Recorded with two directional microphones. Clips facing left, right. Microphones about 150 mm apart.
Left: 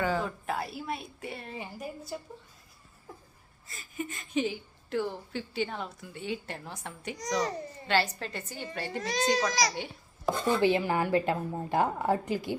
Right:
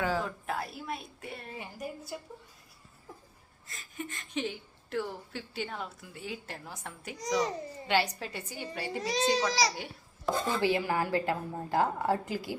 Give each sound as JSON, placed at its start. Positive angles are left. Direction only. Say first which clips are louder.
{"t": 0.0, "sound": "a woman's voice", "louder": "left 2 dB", "side_deg": 0}
{"t": 3.7, "sound": "speech", "louder": "left 3 dB", "side_deg": 5}
{"t": 7.9, "sound": "a woman's voice", "louder": "left 1 dB", "side_deg": -15}
{"t": 9.5, "sound": "a child's voice", "louder": "even", "side_deg": -30}
{"t": 9.7, "sound": "babbling", "louder": "left 4 dB", "side_deg": 0}
{"t": 10.6, "sound": "a woman's voice", "louder": "left 3 dB", "side_deg": 20}